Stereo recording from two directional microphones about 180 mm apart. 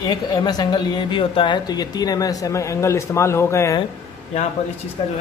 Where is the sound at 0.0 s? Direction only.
20° left (ahead or behind).